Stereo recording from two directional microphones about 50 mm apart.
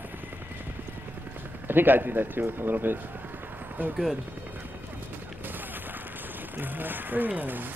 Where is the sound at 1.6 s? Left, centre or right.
Right.